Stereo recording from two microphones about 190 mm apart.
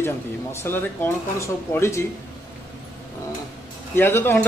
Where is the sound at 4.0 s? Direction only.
10° left (ahead or behind).